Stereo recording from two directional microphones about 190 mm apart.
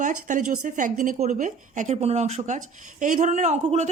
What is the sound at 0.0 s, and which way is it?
A woman's voice, 40° right (ahead or behind).